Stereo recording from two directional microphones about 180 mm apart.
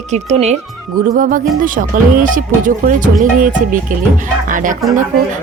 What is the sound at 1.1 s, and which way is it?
Speech, 50° right (ahead or behind).